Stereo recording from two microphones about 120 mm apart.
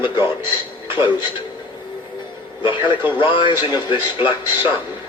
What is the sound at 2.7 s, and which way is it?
Speech, 40° left (ahead or behind).